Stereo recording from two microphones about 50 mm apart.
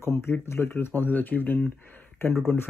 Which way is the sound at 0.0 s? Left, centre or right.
Left.